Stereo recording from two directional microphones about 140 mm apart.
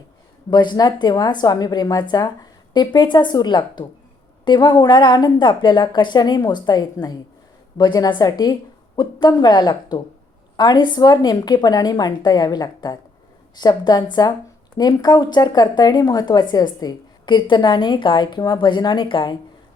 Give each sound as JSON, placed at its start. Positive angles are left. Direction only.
{"t": 0.5, "sound": "a woman's voice", "side_deg": 30}